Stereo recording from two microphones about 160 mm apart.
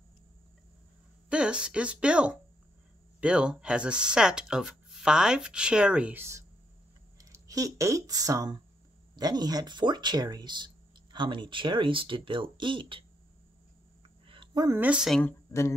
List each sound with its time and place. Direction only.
1.3 s speech: 5° right (ahead or behind); by 13.0 s 30° right (ahead or behind)
14.2 s a sound: 30° right (ahead or behind)
14.8 s speech: 5° right (ahead or behind)
15.2 s speech: 15° left (ahead or behind)